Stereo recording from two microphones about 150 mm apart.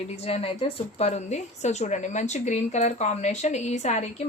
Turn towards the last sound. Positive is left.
turn(degrees=50)  # may be behind; listen again after turning